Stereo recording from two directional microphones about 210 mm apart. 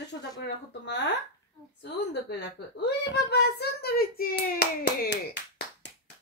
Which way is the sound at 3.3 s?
50° left (ahead or behind).